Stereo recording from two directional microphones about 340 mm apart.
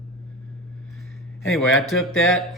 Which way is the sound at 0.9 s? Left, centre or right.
Centre.